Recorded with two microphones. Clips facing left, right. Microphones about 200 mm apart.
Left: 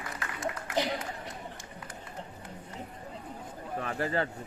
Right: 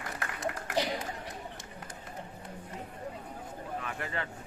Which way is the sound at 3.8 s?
35° left (ahead or behind).